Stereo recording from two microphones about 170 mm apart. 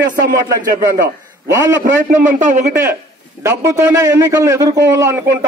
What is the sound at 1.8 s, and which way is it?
Speech, 50° right (ahead or behind).